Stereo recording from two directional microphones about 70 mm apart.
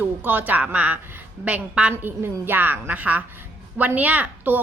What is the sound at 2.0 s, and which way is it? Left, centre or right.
A woman's voice, right.